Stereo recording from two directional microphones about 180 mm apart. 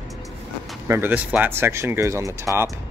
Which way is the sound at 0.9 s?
10° right (ahead or behind).